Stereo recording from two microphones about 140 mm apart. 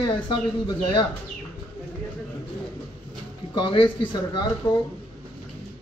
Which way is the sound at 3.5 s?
35° left (ahead or behind).